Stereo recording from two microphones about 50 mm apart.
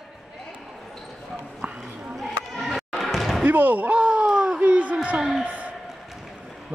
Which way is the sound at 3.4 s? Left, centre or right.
Right.